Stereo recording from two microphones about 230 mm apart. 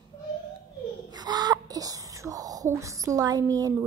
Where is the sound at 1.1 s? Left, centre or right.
Centre.